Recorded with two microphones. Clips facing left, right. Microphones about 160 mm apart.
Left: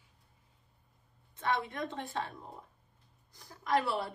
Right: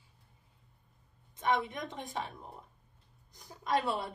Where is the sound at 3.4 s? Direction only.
20° right (ahead or behind).